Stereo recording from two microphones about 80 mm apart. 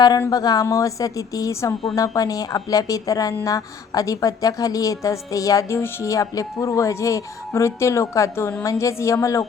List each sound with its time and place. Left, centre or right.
0.3 s a woman's voice: left